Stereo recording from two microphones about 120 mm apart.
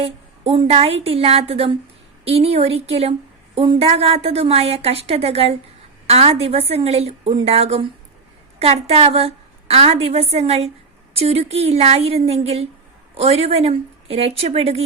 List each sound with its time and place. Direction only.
0.0 s a woman's voice: 55° right (ahead or behind)